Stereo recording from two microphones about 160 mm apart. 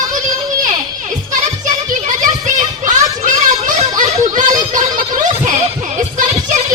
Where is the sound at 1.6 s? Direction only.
50° right (ahead or behind).